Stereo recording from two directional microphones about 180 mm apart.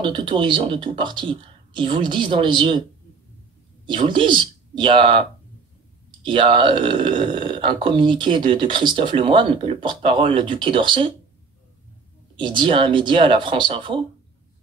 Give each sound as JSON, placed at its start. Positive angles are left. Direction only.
{"t": 0.0, "sound": "speech", "side_deg": -25}
{"t": 3.8, "sound": "speech", "side_deg": -25}
{"t": 6.2, "sound": "speech", "side_deg": -30}
{"t": 12.4, "sound": "speech", "side_deg": -25}